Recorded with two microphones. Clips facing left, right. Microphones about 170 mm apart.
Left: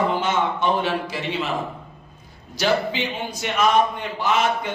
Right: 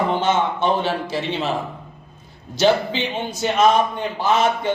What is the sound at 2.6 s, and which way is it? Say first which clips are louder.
A man's voice: right 4 dB; 25° right (ahead or behind).